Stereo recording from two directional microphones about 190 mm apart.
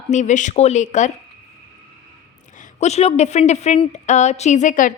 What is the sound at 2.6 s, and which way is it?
A woman's voice, 35° left (ahead or behind).